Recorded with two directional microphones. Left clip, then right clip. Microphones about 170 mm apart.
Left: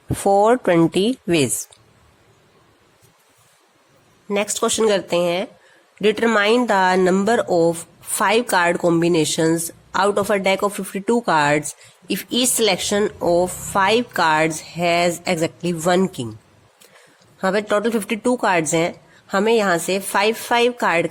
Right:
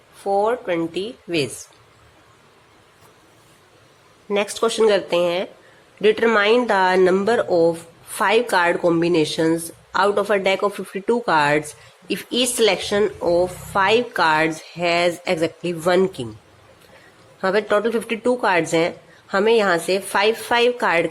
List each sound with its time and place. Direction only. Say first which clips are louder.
0.3 s speech: left 5 dB; 55° left (ahead or behind)
4.3 s speech: even; 30° left (ahead or behind)
17.4 s speech: even; 30° left (ahead or behind)